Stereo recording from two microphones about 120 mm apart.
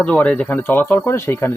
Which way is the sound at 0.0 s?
10° left (ahead or behind).